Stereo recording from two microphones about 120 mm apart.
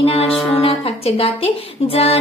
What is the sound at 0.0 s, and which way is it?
Music, 50° left (ahead or behind).